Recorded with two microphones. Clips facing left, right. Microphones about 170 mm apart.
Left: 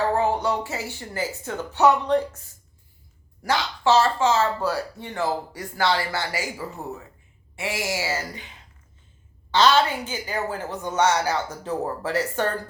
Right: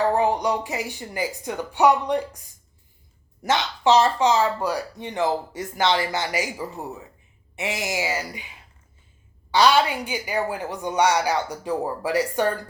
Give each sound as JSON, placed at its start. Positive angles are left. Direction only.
{"t": 0.1, "sound": "a woman's voice", "side_deg": -15}